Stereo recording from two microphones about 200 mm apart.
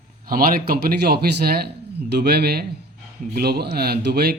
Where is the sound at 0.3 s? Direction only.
45° right (ahead or behind).